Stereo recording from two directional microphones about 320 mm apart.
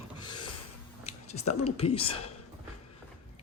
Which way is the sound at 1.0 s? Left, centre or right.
Centre.